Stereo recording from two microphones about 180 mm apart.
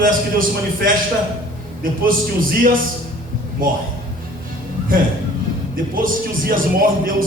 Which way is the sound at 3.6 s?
50° right (ahead or behind).